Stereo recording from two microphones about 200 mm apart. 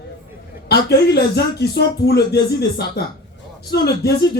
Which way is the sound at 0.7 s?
55° left (ahead or behind).